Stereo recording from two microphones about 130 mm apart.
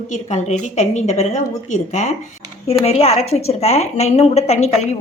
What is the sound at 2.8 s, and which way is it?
A woman's voice, 50° left (ahead or behind).